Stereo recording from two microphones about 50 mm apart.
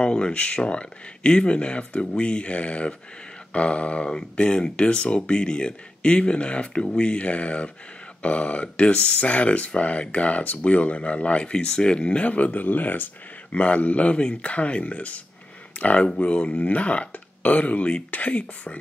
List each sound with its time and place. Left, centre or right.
0.0 s speech: left
13.5 s speech: left